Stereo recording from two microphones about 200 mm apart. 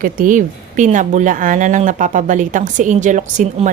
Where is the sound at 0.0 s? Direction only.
40° right (ahead or behind).